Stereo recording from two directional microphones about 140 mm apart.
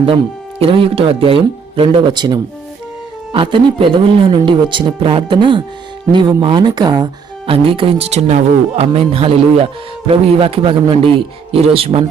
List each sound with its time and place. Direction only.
0.6 s speech: 40° right (ahead or behind)
7.5 s speech: 40° right (ahead or behind)